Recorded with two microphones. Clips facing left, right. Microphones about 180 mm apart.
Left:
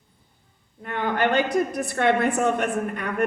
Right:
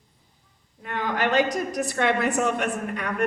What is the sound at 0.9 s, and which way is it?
A woman's voice, 55° left (ahead or behind).